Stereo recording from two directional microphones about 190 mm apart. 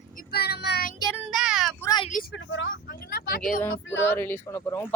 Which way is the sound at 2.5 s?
80° left.